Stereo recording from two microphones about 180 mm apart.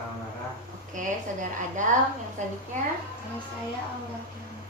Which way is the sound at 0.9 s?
45° right (ahead or behind).